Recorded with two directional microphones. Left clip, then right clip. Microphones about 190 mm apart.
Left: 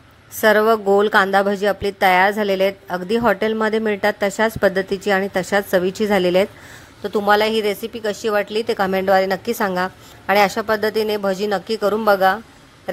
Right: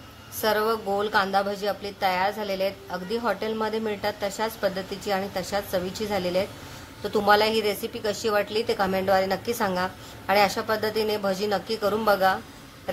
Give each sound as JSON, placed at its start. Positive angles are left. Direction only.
{"t": 0.4, "sound": "a woman's voice", "side_deg": 35}